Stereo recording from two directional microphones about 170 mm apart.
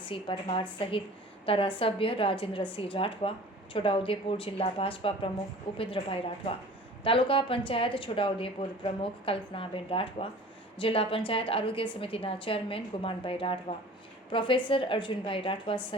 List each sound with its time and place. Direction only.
0.1 s a woman's voice: 30° left (ahead or behind)